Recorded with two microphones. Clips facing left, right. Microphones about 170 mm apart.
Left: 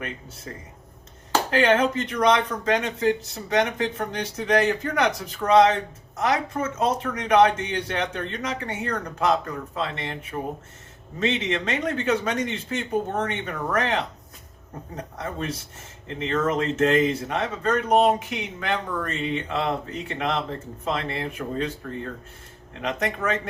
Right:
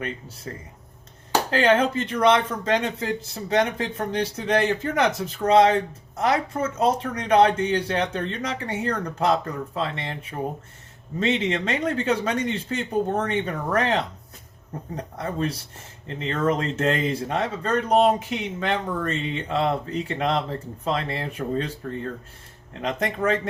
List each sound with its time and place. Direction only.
1.5 s speech: 30° right (ahead or behind)
11.2 s speech: 30° right (ahead or behind)
22.8 s speech: 30° right (ahead or behind)